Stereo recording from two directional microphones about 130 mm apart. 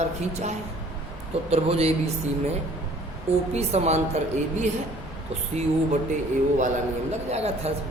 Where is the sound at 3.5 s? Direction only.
55° right (ahead or behind).